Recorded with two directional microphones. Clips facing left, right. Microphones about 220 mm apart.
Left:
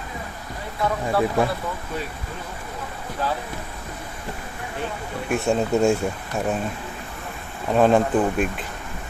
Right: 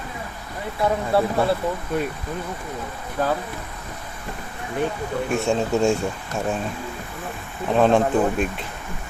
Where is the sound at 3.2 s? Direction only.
50° right (ahead or behind).